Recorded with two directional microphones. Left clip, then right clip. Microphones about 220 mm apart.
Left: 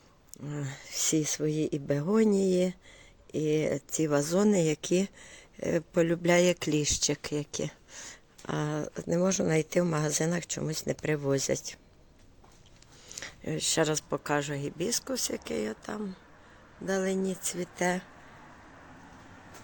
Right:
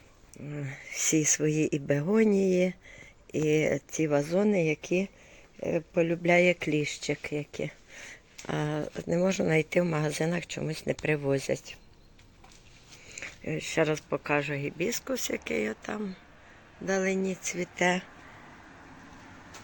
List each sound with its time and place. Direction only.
0.4 s speech: 10° left (ahead or behind)
13.1 s speech: 10° left (ahead or behind)
15.4 s speech: centre (ahead or behind)